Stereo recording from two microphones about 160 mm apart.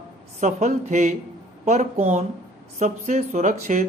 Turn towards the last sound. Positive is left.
turn(degrees=-50)  # may be behind; listen again after turning